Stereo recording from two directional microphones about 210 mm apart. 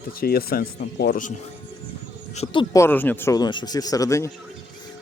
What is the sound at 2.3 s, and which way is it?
Speech, 25° left (ahead or behind).